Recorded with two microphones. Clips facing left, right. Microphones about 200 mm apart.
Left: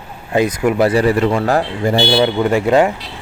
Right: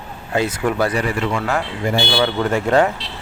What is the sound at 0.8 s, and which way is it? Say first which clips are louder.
Speech: left 10 dB; 35° left (ahead or behind).